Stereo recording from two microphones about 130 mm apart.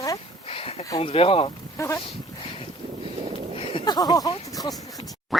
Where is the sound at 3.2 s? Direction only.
50° right (ahead or behind).